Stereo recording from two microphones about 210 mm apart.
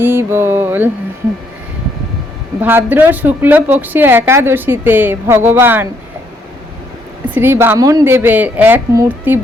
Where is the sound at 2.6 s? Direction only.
10° right (ahead or behind).